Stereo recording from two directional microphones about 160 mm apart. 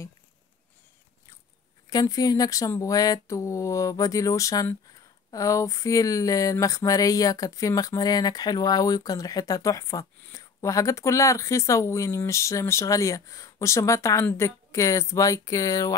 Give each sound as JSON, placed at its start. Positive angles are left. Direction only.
{"t": 1.9, "sound": "speech", "side_deg": 25}